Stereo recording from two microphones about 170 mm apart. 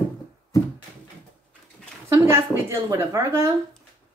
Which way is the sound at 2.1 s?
15° right (ahead or behind).